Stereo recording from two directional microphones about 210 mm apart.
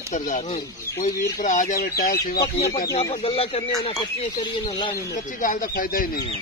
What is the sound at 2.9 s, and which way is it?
Speech, 25° left (ahead or behind).